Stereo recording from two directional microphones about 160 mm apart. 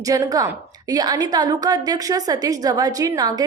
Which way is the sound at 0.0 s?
20° right (ahead or behind).